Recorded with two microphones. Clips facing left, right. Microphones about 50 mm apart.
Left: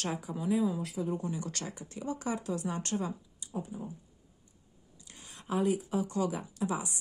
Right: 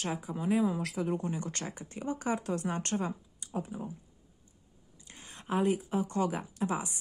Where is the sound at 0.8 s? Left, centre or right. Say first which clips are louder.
Right 2 dB; right.